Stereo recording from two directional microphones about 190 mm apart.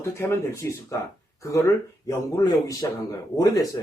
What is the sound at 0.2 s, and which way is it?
A man's voice, 15° left (ahead or behind).